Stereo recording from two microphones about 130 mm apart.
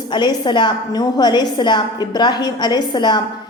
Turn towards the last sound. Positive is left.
turn(degrees=35)  # may be behind; listen again after turning